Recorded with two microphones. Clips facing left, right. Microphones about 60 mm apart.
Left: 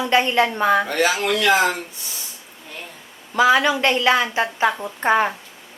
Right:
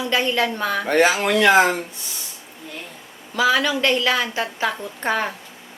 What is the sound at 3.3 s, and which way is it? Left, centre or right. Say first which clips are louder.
A woman's voice: left 3 dB; left.